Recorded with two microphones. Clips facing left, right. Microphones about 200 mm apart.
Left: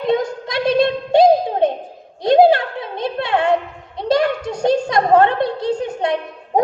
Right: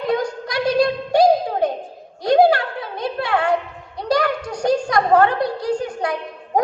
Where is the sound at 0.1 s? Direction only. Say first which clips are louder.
Left 3 dB; 25° left (ahead or behind).